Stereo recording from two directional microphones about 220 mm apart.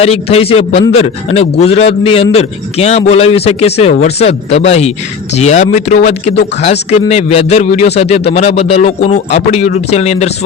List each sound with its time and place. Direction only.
0.0 s a man's voice: 25° left (ahead or behind)